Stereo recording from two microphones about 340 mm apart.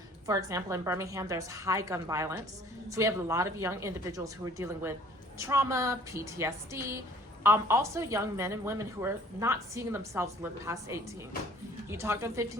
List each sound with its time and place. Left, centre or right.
0.3 s a woman's voice: centre